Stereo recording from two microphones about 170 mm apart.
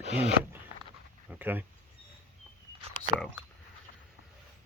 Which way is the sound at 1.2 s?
10° right (ahead or behind).